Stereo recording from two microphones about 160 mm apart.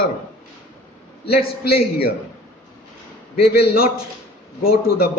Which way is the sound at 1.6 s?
80° left.